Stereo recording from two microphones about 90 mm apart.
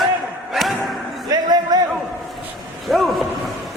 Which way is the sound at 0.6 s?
Centre (ahead or behind).